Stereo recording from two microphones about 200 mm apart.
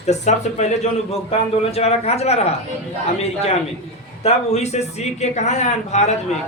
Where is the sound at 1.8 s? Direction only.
30° left (ahead or behind).